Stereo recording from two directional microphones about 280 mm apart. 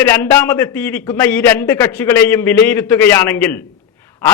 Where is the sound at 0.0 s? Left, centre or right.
Centre.